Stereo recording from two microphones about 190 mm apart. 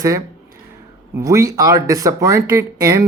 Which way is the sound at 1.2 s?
15° right (ahead or behind).